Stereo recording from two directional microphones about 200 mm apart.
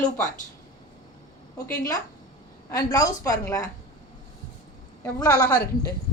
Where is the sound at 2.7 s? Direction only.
20° left (ahead or behind).